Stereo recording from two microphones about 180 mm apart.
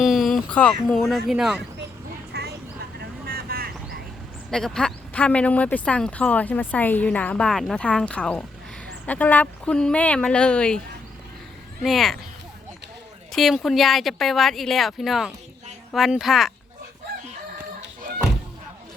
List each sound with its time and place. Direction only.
0.0 s speech: centre (ahead or behind)
2.3 s vehicle: 65° right (ahead or behind)
4.5 s speech: 5° left (ahead or behind)
11.8 s speech: centre (ahead or behind)
13.3 s speech: centre (ahead or behind)